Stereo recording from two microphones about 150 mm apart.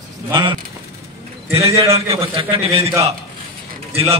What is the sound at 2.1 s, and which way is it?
Speech, 40° right (ahead or behind).